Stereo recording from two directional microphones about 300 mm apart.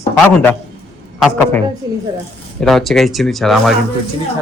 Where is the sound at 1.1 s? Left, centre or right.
Centre.